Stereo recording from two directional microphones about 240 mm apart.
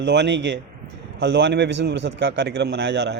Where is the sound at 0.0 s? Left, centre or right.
Right.